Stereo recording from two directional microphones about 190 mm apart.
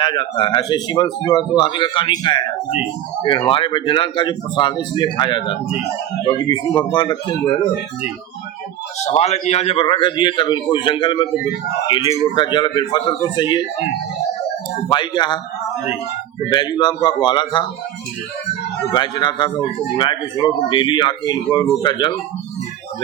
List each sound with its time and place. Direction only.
0.0 s a man's voice: 25° left (ahead or behind)
9.0 s a man's voice: 35° left (ahead or behind)
14.8 s a man's voice: 25° left (ahead or behind)
16.5 s a man's voice: 20° left (ahead or behind)
18.9 s a man's voice: 25° left (ahead or behind)